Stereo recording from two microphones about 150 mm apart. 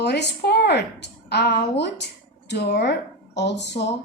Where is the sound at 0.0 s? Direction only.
90° left.